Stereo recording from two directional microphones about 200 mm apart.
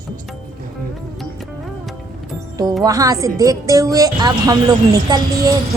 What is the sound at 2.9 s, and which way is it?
A woman's voice, 15° right (ahead or behind).